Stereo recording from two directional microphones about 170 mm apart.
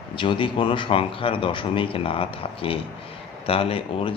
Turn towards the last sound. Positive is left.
turn(degrees=35)  # may be behind; listen again after turning